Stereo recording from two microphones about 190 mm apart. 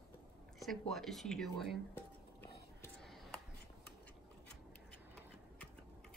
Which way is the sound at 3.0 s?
Centre (ahead or behind).